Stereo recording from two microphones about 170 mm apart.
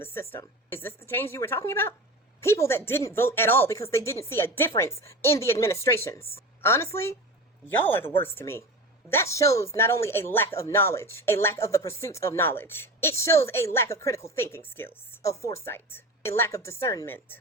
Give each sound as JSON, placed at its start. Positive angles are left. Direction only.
{"t": 0.0, "sound": "speech", "side_deg": 15}